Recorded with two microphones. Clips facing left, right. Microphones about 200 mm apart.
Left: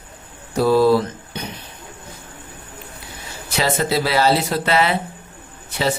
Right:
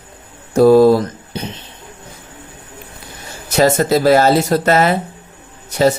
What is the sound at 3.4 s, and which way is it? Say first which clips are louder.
A man's voice: right 7 dB; 45° right (ahead or behind).